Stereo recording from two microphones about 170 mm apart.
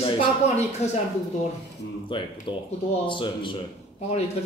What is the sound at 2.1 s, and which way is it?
Speech, 30° left (ahead or behind).